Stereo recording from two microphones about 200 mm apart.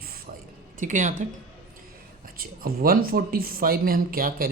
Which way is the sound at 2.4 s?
45° right (ahead or behind).